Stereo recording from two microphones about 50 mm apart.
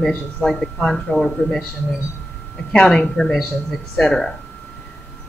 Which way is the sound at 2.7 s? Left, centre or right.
Centre.